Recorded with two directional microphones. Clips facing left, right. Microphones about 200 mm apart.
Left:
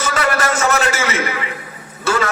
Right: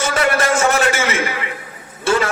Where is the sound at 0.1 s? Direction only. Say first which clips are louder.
Right 1 dB; 30° right (ahead or behind).